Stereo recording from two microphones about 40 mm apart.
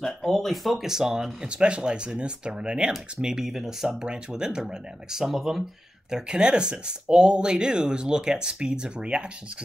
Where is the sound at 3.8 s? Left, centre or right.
Right.